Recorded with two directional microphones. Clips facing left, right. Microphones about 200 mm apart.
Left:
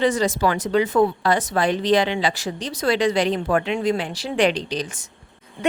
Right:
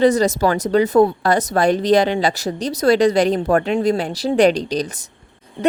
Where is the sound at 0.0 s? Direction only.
40° right (ahead or behind).